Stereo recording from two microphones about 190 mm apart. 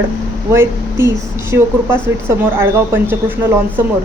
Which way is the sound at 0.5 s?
15° right (ahead or behind).